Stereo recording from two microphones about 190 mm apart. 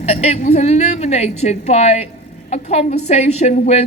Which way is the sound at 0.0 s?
35° left (ahead or behind).